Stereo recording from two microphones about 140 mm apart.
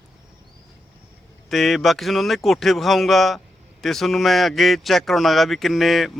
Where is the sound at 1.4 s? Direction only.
Centre (ahead or behind).